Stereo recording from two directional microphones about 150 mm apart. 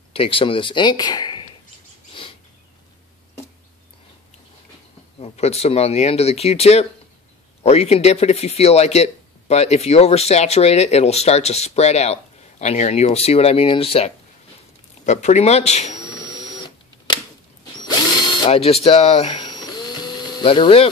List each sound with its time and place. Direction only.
0.1 s speech: 35° left (ahead or behind)
5.2 s speech: 45° left (ahead or behind)
15.0 s speech: 50° left (ahead or behind)
16.2 s printer: 30° left (ahead or behind)
18.4 s speech: 40° left (ahead or behind)
19.4 s a sound: 30° left (ahead or behind)